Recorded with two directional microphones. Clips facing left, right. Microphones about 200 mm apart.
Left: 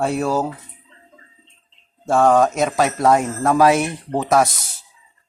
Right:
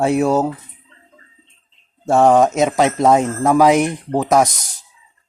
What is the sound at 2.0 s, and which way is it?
Speech, 20° right (ahead or behind).